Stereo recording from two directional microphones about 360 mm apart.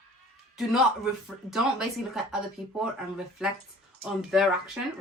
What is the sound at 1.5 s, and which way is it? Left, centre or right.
Speech, centre.